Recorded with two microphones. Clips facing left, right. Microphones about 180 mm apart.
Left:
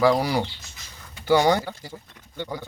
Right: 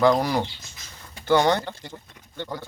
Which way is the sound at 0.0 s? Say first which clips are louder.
Even; 5° left (ahead or behind).